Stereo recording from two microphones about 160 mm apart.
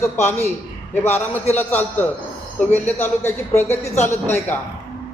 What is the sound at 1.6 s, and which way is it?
A man's voice, 10° left (ahead or behind).